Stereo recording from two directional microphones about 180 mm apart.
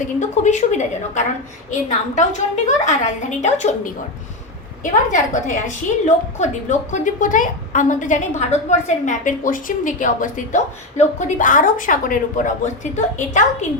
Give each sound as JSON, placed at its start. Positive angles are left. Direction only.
{"t": 0.2, "sound": "a woman's voice", "side_deg": 40}
{"t": 4.8, "sound": "a woman's voice", "side_deg": 45}